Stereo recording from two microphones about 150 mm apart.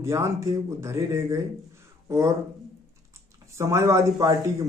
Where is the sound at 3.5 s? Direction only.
20° right (ahead or behind).